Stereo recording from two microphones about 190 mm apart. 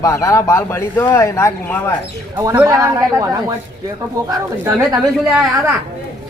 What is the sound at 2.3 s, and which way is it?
A man's voice, 15° right (ahead or behind).